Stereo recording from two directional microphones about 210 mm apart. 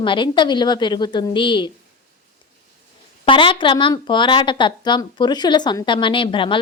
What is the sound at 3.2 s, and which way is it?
A woman's voice, 25° left (ahead or behind).